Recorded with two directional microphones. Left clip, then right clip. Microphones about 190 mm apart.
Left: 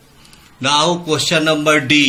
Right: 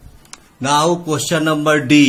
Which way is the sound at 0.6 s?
55° right (ahead or behind).